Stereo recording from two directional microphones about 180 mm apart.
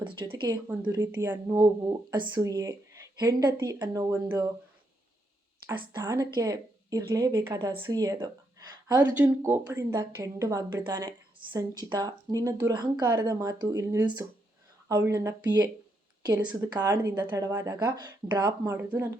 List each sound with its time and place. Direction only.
0.0 s speech: 30° right (ahead or behind)
0.7 s a woman's voice: 10° right (ahead or behind)
0.9 s a woman's voice: 20° right (ahead or behind)
5.9 s speech: 20° right (ahead or behind)
9.1 s a woman's voice: 10° right (ahead or behind)